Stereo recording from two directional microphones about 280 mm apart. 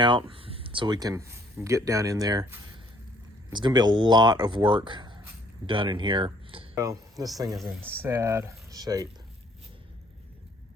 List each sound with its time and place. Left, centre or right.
0.0 s speech: centre